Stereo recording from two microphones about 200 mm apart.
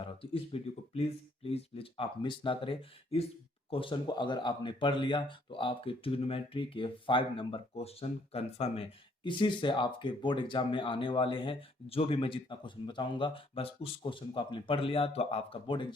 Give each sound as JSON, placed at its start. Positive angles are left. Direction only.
{"t": 0.0, "sound": "speech", "side_deg": 25}